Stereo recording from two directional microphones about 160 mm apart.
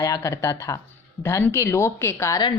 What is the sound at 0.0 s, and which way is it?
Speech, 20° left (ahead or behind).